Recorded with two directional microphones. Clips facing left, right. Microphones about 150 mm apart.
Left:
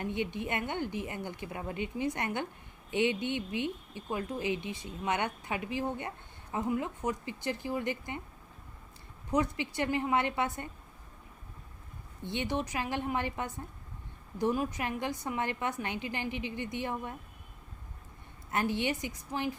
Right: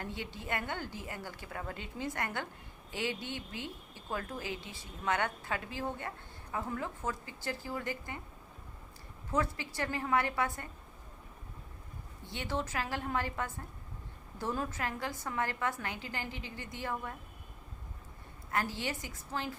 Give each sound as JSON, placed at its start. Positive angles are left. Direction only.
{"t": 0.0, "sound": "speech", "side_deg": 20}
{"t": 9.6, "sound": "speech", "side_deg": 20}
{"t": 12.2, "sound": "speech", "side_deg": 20}
{"t": 18.5, "sound": "speech", "side_deg": 20}